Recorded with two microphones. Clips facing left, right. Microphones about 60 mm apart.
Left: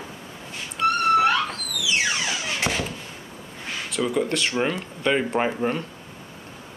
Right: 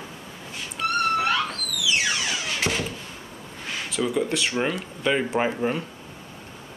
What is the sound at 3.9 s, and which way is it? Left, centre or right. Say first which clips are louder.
Speech: left 1 dB; centre.